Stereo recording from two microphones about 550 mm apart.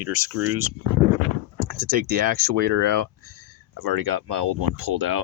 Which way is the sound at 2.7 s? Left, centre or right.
Right.